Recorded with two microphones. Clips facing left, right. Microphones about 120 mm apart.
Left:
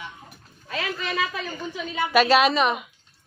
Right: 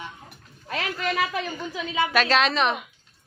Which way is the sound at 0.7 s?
55° right (ahead or behind).